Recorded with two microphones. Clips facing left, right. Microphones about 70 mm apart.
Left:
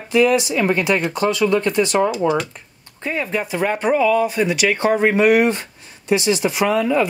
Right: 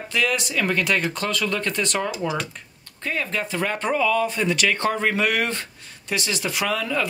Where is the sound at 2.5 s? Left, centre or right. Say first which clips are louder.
Even; centre.